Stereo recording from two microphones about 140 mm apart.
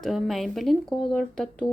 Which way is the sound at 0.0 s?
Centre (ahead or behind).